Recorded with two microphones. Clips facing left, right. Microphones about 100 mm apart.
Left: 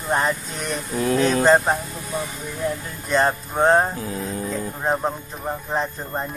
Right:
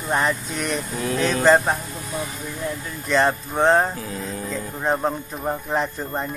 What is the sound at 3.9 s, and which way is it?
Music, 30° left (ahead or behind).